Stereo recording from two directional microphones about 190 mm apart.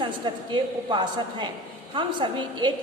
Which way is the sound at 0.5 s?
25° right (ahead or behind).